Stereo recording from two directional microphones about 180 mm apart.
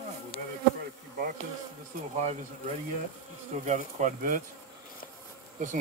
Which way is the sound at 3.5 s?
40° right (ahead or behind).